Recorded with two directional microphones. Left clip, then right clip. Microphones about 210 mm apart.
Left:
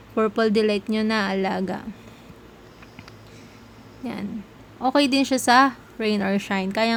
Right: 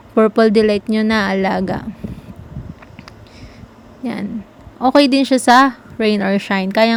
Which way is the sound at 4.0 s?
20° right (ahead or behind).